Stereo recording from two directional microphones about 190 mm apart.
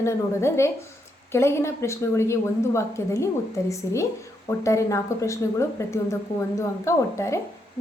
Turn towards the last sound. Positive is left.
turn(degrees=15)  # may be behind; listen again after turning